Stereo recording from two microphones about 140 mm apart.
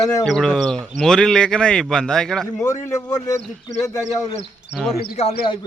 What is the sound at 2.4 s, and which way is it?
Speech, 20° left (ahead or behind).